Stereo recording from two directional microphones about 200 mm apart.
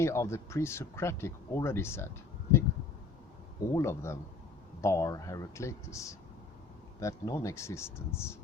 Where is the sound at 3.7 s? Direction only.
15° left (ahead or behind).